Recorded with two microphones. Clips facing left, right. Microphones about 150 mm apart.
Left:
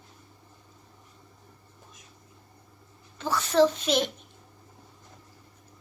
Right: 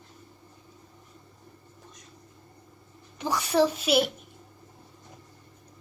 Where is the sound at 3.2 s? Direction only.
15° right (ahead or behind).